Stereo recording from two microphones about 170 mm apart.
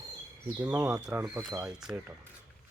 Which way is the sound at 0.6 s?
5° right (ahead or behind).